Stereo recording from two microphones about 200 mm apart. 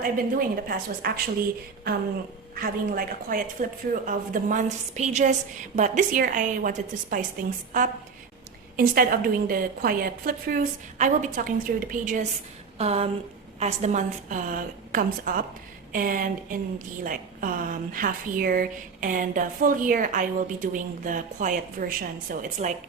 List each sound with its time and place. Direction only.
0.0 s a woman's voice: 45° right (ahead or behind)
2.6 s a woman's voice: 45° right (ahead or behind)